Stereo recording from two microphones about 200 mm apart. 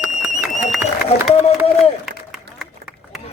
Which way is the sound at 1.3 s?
30° left (ahead or behind).